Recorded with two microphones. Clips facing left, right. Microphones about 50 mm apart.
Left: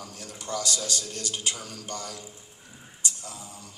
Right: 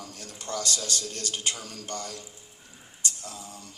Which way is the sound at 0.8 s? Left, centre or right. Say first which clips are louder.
Even; right.